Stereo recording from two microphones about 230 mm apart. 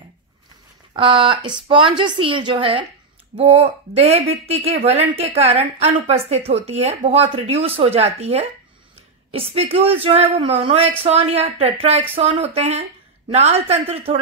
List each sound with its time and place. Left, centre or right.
0.9 s speech: right